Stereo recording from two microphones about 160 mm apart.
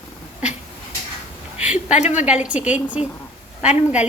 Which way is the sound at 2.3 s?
10° right (ahead or behind).